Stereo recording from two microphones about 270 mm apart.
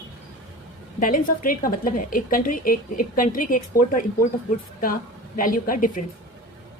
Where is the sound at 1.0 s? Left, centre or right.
Left.